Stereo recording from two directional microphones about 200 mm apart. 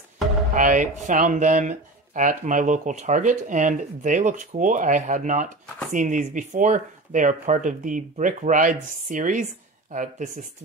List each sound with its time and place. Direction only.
0.6 s speech: 40° right (ahead or behind)